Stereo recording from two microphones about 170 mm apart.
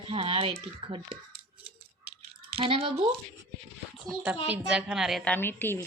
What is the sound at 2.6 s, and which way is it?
Speech, 35° right (ahead or behind).